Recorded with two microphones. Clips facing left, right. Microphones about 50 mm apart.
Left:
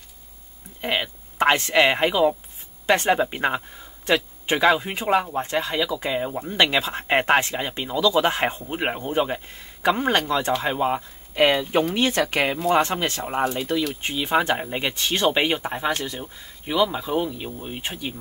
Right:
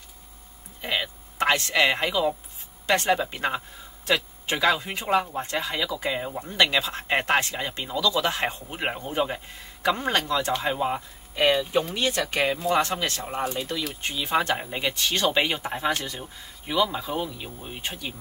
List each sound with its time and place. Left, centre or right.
0.7 s a man's voice: left
4.0 s a sound: centre
4.6 s speech: left
6.5 s a man's voice: left
8.2 s a man's voice: left
11.7 s a man's voice: left
13.4 s speech: centre
14.0 s speech: centre